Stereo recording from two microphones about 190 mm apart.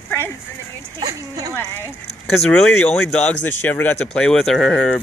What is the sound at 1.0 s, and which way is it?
Speech, 20° right (ahead or behind).